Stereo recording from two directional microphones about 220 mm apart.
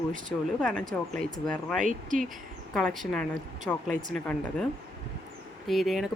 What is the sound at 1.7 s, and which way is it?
Speech, 35° right (ahead or behind).